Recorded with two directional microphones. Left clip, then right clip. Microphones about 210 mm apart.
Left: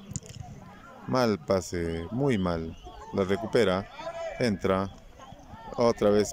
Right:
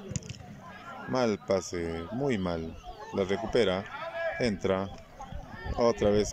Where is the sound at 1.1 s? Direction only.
Centre (ahead or behind).